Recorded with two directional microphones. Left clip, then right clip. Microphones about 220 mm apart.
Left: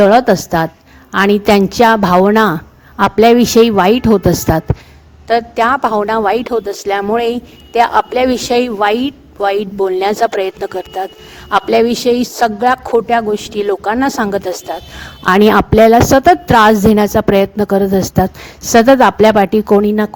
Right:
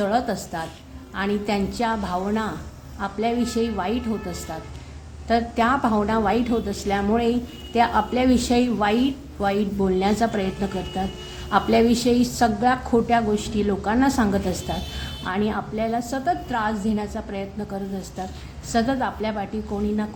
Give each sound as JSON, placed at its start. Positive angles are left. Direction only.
{"t": 0.0, "sound": "a woman's voice", "side_deg": 45}